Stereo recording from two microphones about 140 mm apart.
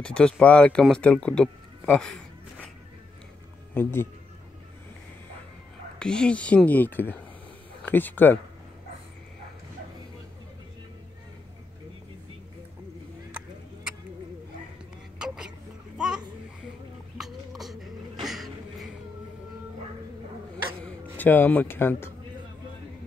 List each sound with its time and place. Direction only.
0.0 s speech: 5° left (ahead or behind)
3.7 s speech: 15° left (ahead or behind)
5.9 s speech: 5° left (ahead or behind)
15.1 s a sound: 5° right (ahead or behind)
17.2 s a sound: centre (ahead or behind)
21.2 s speech: 15° left (ahead or behind)